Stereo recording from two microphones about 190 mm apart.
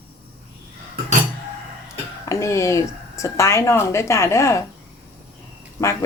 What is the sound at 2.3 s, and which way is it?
Speech, 15° left (ahead or behind).